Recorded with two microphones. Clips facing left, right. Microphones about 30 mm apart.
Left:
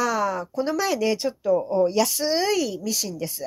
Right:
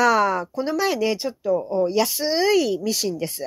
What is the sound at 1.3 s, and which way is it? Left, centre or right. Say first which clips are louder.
Speech: even; centre.